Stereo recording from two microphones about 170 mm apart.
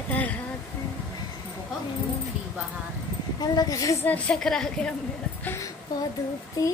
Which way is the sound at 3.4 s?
20° left (ahead or behind).